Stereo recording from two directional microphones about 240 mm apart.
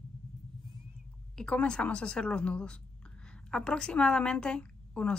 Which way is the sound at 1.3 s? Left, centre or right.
Centre.